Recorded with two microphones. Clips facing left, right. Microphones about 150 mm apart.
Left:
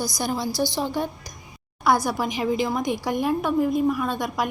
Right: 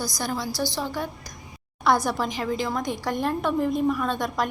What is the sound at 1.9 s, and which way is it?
A woman's voice, 5° left (ahead or behind).